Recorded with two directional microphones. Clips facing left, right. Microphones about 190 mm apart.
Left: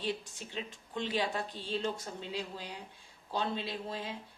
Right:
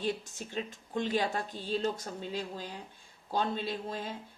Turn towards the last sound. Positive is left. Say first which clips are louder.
# right 3 dB
turn(degrees=-45)  # may be behind; listen again after turning